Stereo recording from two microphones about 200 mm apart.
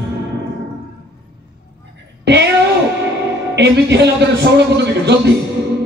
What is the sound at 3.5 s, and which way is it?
Music, 55° right (ahead or behind).